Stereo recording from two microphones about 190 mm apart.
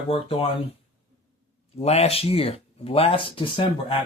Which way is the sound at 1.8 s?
35° left (ahead or behind).